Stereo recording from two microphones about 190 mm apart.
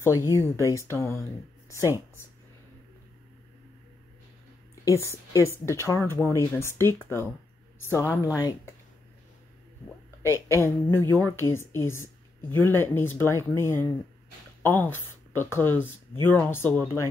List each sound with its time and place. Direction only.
0.0 s speech: 15° left (ahead or behind)
4.8 s speech: 15° left (ahead or behind)
9.8 s speech: 15° left (ahead or behind)